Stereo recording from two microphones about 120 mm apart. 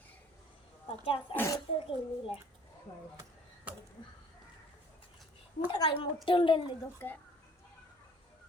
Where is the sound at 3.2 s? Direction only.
15° right (ahead or behind).